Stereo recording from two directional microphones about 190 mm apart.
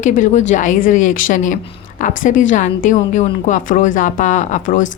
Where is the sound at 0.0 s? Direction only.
40° left (ahead or behind).